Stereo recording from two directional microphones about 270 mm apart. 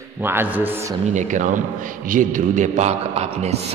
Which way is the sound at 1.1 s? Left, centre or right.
Right.